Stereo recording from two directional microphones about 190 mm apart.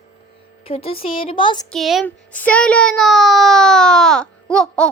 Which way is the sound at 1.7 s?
Centre (ahead or behind).